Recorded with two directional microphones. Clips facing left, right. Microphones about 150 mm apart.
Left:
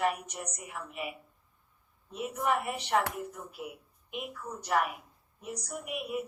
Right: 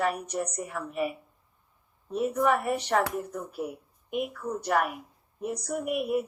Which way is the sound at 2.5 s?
40° right (ahead or behind).